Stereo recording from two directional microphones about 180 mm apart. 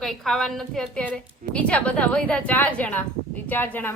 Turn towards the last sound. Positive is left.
turn(degrees=10)  # may be behind; listen again after turning